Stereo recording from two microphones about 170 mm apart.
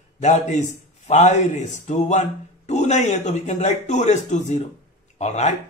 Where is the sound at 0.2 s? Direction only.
45° left (ahead or behind).